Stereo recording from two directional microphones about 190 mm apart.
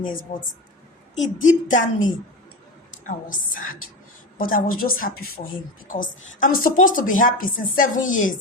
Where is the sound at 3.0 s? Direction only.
45° left (ahead or behind).